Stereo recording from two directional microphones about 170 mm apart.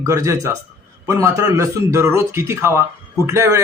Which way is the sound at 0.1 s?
15° right (ahead or behind).